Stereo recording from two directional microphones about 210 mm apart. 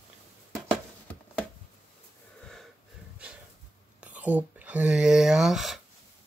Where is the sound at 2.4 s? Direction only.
Centre (ahead or behind).